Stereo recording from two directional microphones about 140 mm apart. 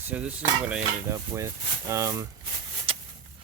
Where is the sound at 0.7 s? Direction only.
20° right (ahead or behind).